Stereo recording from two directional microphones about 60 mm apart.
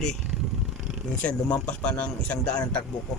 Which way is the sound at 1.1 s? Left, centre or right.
Left.